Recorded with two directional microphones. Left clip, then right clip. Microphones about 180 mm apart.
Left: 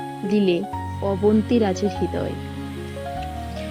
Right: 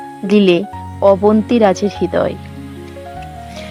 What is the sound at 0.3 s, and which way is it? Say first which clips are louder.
Speech: right 9 dB; 65° right (ahead or behind).